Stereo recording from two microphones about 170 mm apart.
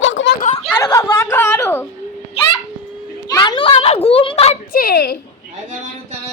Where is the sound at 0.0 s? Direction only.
90° left.